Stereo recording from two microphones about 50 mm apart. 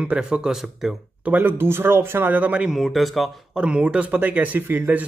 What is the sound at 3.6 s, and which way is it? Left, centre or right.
Speech, right.